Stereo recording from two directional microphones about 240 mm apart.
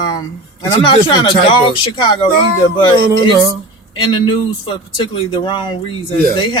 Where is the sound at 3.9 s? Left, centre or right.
Centre.